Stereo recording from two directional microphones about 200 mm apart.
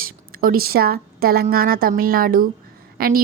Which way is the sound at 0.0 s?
45° right (ahead or behind).